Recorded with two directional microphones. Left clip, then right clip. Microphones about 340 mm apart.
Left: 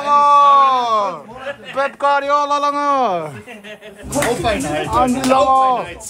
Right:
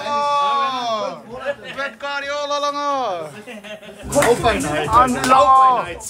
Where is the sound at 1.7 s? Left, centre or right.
Centre.